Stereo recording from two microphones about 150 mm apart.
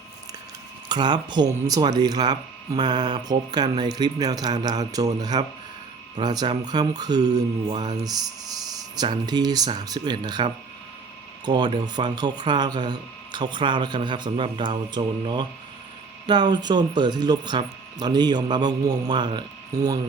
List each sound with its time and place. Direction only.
0.9 s speech: 30° right (ahead or behind)